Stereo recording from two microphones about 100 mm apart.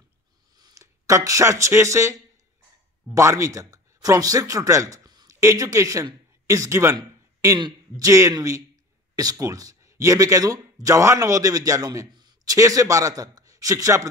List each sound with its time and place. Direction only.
0.6 s speech: 40° right (ahead or behind)
3.2 s speech: 30° right (ahead or behind)
8.0 s speech: 30° right (ahead or behind)
12.1 s a sound: 45° right (ahead or behind)
12.5 s speech: 35° right (ahead or behind)